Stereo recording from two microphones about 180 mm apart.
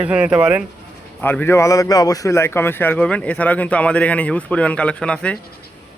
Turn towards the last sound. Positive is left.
turn(degrees=5)  # may be behind; listen again after turning